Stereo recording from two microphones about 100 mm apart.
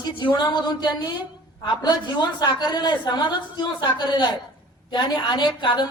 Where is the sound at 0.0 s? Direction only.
55° left (ahead or behind).